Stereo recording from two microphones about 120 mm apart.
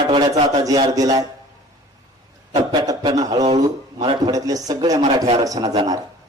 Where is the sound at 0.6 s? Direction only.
30° right (ahead or behind).